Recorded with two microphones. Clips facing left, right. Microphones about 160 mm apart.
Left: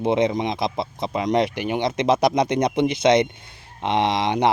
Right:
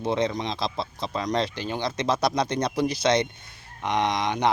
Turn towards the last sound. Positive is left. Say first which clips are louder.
# left 4 dB
turn(degrees=25)  # may be behind; listen again after turning